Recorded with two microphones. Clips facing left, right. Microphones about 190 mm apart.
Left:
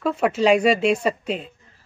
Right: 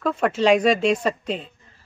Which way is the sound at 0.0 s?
10° left (ahead or behind).